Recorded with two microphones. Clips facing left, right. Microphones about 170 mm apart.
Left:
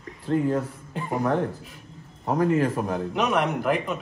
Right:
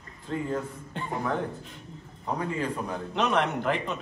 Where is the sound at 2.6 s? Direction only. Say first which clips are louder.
Left 7 dB; 50° left (ahead or behind).